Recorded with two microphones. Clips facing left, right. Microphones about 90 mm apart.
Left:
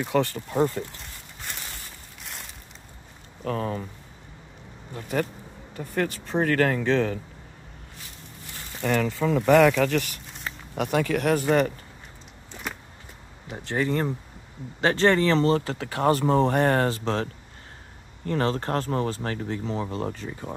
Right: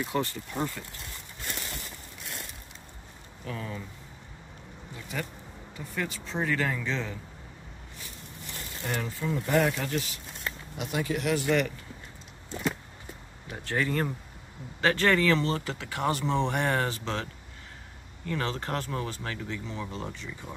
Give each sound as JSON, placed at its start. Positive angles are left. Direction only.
{"t": 0.0, "sound": "speech", "side_deg": 60}
{"t": 0.5, "sound": "speech", "side_deg": 40}
{"t": 3.4, "sound": "speech", "side_deg": 50}
{"t": 4.9, "sound": "speech", "side_deg": 50}
{"t": 8.8, "sound": "speech", "side_deg": 90}
{"t": 13.5, "sound": "speech", "side_deg": 25}